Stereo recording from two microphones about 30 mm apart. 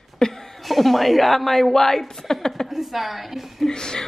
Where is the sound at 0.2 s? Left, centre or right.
Left.